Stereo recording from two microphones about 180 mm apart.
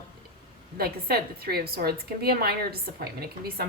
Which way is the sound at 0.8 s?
60° right (ahead or behind).